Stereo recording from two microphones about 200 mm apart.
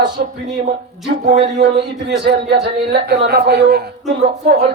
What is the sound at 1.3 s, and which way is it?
Speech, 55° right (ahead or behind).